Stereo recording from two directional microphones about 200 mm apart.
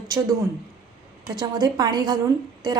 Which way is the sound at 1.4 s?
20° right (ahead or behind).